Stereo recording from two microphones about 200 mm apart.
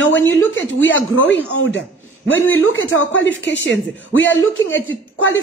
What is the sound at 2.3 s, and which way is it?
Speech, 80° left.